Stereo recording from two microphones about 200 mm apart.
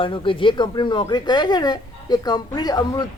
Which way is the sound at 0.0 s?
25° left (ahead or behind).